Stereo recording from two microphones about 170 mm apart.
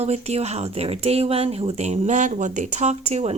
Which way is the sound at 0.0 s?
40° right (ahead or behind).